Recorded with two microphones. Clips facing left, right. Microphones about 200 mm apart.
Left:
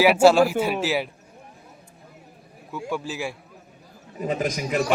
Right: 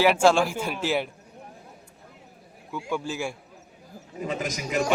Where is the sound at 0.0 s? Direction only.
10° left (ahead or behind).